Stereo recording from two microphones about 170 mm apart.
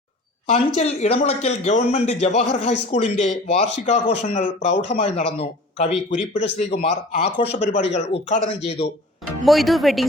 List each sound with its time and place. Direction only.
0.4 s a man's voice: 35° left (ahead or behind)
9.4 s speech: centre (ahead or behind)